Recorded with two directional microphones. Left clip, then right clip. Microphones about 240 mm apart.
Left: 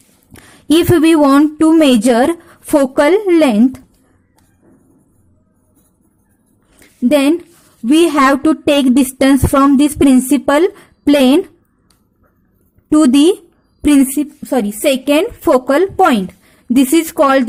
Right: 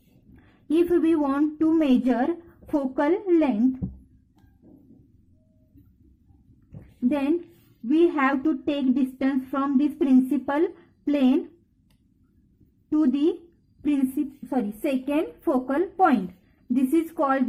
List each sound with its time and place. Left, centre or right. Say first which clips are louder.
0.3 s a woman's voice: left 11 dB; left
7.1 s a woman's voice: left 14 dB; left
12.9 s a woman's voice: left 13 dB; left